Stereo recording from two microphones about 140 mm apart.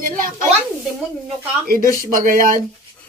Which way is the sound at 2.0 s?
80° right.